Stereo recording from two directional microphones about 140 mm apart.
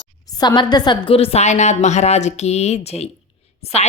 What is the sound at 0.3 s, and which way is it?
Speech, 30° left (ahead or behind).